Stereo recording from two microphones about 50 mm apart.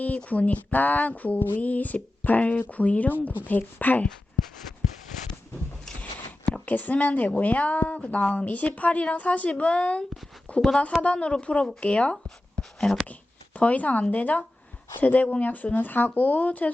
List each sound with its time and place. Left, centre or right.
0.3 s speech: left
6.7 s speech: left
10.5 s a sound: left
11.0 s speech: left
12.5 s a sound: centre
13.1 s speech: left